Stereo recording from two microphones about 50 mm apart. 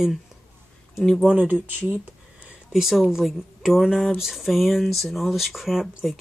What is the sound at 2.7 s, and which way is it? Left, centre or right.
Speech, centre.